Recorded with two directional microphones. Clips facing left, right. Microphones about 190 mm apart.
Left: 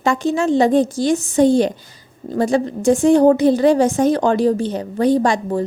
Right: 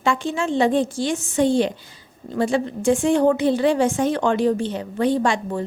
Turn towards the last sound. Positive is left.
turn(degrees=40)  # may be behind; listen again after turning